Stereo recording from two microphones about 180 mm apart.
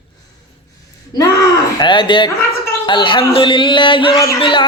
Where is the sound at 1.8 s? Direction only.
25° left (ahead or behind).